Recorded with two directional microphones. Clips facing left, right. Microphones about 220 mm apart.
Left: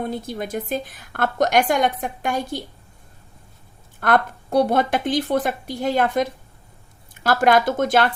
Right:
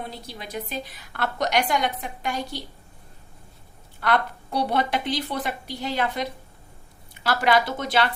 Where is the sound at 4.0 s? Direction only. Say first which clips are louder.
Left 4 dB; 50° left (ahead or behind).